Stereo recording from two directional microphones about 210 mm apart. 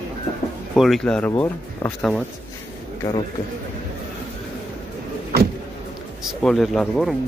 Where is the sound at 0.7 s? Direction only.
Centre (ahead or behind).